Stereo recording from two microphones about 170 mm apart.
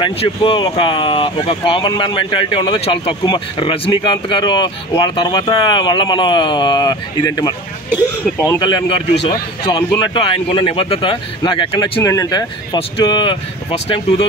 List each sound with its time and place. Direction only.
0.0 s speech: 30° left (ahead or behind)